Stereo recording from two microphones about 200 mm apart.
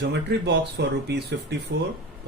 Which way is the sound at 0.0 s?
60° right (ahead or behind).